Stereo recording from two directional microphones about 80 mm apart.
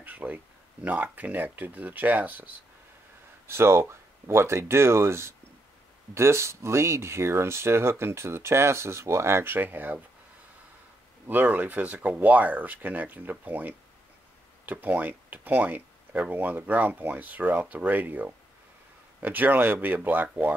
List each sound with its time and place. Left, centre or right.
0.0 s speech: centre
3.4 s speech: right
11.2 s speech: right